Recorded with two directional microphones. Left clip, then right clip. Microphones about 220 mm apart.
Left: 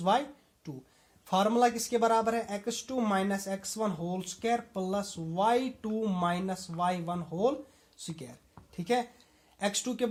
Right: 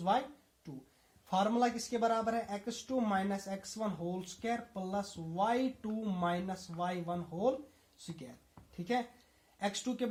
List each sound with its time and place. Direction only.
0.7 s a woman's voice: 45° left (ahead or behind)